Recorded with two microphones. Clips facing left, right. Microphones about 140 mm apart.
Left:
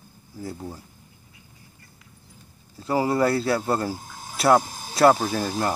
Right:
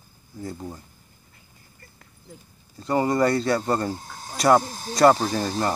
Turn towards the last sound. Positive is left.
turn(degrees=5)  # may be behind; listen again after turning